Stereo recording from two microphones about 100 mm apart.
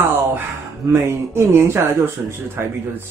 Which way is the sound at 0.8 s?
25° right (ahead or behind).